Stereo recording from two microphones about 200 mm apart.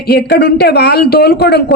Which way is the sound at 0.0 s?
50° left (ahead or behind).